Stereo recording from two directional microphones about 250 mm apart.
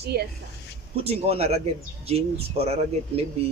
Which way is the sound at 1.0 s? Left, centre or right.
Right.